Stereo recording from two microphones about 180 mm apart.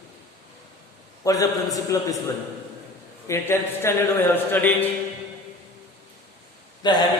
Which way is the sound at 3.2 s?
15° left (ahead or behind).